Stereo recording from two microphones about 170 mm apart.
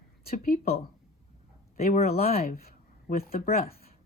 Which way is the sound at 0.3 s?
60° left (ahead or behind).